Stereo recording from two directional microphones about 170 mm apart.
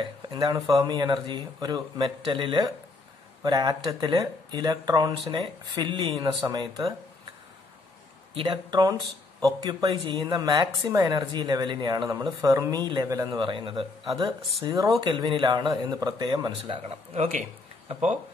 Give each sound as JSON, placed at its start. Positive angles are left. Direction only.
{"t": 0.0, "sound": "speech", "side_deg": -25}
{"t": 8.4, "sound": "speech", "side_deg": -25}